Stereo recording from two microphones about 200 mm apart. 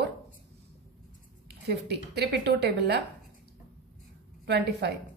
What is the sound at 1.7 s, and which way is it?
A woman's voice, 55° right (ahead or behind).